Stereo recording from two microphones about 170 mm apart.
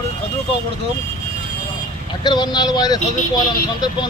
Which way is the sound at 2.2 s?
25° left (ahead or behind).